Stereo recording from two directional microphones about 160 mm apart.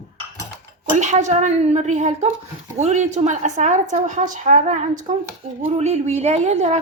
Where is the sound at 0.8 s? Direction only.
45° right (ahead or behind).